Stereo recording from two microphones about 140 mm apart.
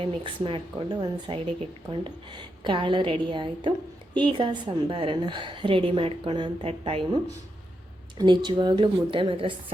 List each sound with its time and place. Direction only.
0.0 s a woman's voice: 40° right (ahead or behind)
8.2 s a woman's voice: 35° right (ahead or behind)